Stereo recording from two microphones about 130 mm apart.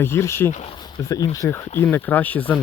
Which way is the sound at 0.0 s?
20° left (ahead or behind).